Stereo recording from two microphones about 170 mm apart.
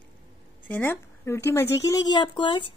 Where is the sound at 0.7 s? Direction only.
10° left (ahead or behind).